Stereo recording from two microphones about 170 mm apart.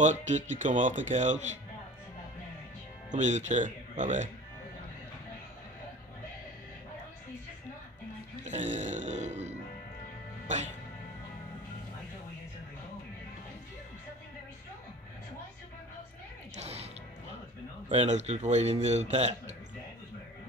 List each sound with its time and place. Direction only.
0.0 s speech: 45° right (ahead or behind)
3.1 s speech: 45° right (ahead or behind)
8.5 s grunt: 45° right (ahead or behind)
16.5 s music: 40° right (ahead or behind)
17.8 s a man's voice: 45° right (ahead or behind)